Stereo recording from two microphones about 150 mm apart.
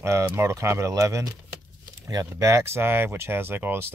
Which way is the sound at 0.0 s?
20° right (ahead or behind).